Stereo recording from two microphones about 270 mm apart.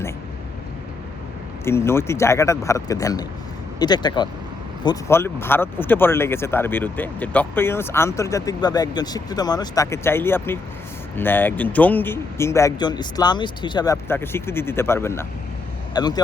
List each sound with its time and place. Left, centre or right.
1.6 s speech: centre